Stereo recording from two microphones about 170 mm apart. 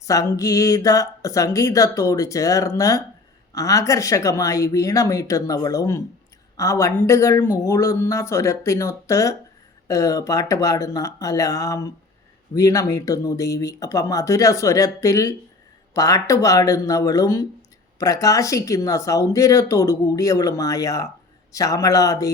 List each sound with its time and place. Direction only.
0.0 s speech: 20° left (ahead or behind)